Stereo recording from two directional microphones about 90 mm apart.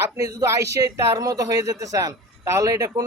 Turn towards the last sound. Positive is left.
turn(degrees=-40)  # may be behind; listen again after turning